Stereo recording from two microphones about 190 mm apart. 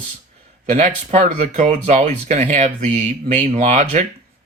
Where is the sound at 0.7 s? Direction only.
45° right (ahead or behind).